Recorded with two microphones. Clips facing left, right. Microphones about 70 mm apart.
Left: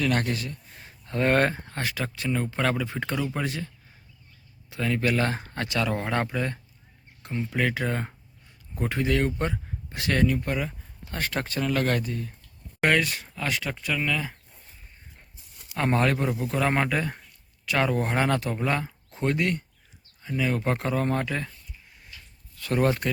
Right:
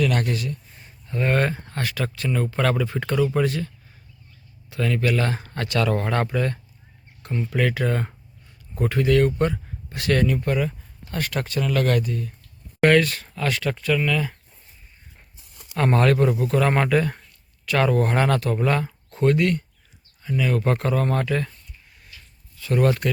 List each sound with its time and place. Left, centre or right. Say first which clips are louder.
0.0 s speech: right 3 dB; left
0.8 s a sound: left 2 dB; left
1.6 s speech: right 3 dB; centre
4.7 s speech: right 3 dB; left
5.5 s speech: right 4 dB; centre
12.8 s speech: right 6 dB; centre
15.7 s a man's voice: right 4 dB; centre
22.8 s speech: right 3 dB; left